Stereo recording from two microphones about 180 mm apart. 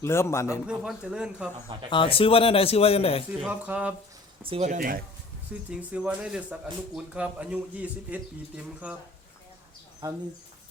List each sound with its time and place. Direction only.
0.0 s a man's voice: 15° left (ahead or behind)
0.7 s a man's voice: 5° right (ahead or behind)
1.9 s speech: 30° left (ahead or behind)
3.4 s speech: 5° right (ahead or behind)
4.4 s speech: 35° right (ahead or behind)
5.7 s speech: 5° right (ahead or behind)